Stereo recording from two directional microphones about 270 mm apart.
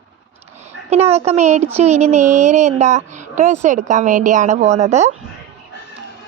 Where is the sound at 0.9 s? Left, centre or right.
Right.